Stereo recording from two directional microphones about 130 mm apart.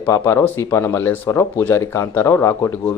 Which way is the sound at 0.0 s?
20° left (ahead or behind).